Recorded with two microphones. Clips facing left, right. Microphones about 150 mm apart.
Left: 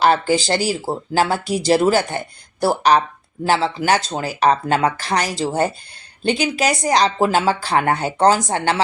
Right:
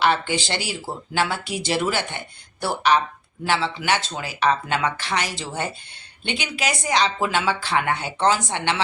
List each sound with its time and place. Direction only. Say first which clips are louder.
0.0 s speech: left 5 dB; 40° left (ahead or behind)